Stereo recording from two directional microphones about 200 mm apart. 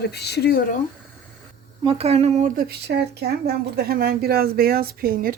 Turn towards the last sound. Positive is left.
turn(degrees=-45)  # may be behind; listen again after turning